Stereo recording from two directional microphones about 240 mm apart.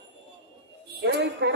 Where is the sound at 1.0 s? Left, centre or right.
Right.